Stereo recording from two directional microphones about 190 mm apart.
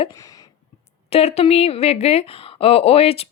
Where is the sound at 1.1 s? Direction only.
30° left (ahead or behind).